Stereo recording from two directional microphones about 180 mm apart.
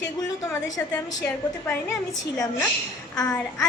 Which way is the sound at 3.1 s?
5° left (ahead or behind).